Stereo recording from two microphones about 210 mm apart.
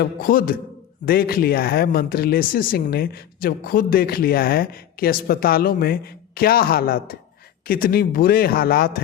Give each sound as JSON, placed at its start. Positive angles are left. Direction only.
{"t": 0.0, "sound": "speech", "side_deg": 40}